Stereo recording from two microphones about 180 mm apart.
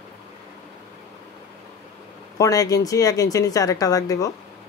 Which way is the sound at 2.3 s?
20° left (ahead or behind).